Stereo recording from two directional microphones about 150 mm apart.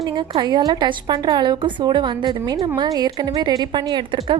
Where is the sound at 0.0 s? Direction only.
30° right (ahead or behind).